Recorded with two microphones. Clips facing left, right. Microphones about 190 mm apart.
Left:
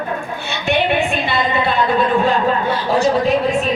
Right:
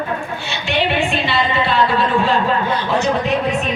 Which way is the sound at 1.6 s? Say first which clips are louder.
Left 1 dB; 50° left (ahead or behind).